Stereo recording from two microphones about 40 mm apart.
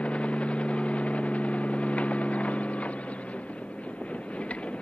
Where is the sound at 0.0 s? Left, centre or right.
Left.